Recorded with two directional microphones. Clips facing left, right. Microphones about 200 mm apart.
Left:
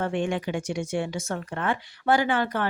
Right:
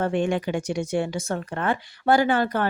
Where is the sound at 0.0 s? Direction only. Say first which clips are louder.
Right 3 dB; 40° right (ahead or behind).